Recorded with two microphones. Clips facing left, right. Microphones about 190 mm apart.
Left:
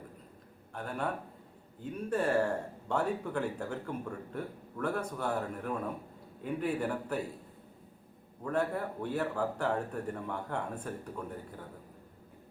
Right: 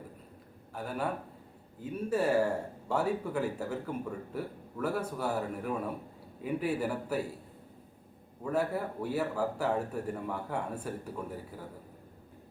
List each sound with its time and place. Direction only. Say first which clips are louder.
0.7 s a man's voice: right 1 dB; 5° right (ahead or behind)
8.4 s speech: right 1 dB; 5° right (ahead or behind)